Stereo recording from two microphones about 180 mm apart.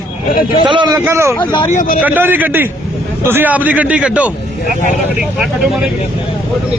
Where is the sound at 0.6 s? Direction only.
25° right (ahead or behind).